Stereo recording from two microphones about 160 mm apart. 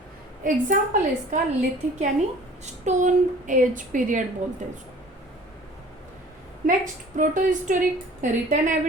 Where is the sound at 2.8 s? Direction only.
50° right (ahead or behind).